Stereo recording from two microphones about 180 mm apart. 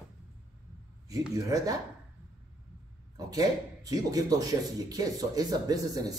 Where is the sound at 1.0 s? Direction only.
20° right (ahead or behind).